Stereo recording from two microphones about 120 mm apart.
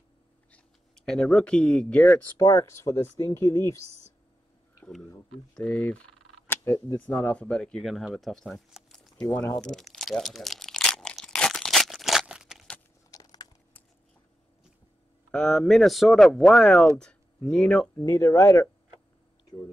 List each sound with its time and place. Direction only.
0.5 s speech: 5° left (ahead or behind)
2.3 s speech: 25° left (ahead or behind)
5.6 s fowl: 10° left (ahead or behind)
6.4 s a sound: 20° left (ahead or behind)
7.1 s speech: 10° left (ahead or behind)
9.6 s crunch: 5° left (ahead or behind)
13.1 s a sound: 30° left (ahead or behind)
15.3 s speech: 5° left (ahead or behind)
17.9 s speech: 20° left (ahead or behind)